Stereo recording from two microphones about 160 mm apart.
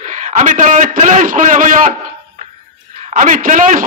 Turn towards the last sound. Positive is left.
turn(degrees=-55)  # may be behind; listen again after turning